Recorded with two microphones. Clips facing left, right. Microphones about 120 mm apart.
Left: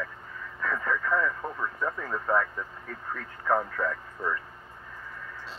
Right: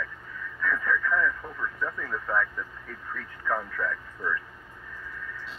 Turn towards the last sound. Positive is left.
turn(degrees=40)  # may be behind; listen again after turning